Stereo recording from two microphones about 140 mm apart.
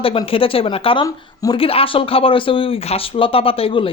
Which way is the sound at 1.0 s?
25° left (ahead or behind).